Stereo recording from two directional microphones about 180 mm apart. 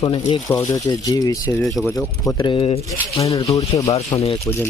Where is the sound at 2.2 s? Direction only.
25° left (ahead or behind).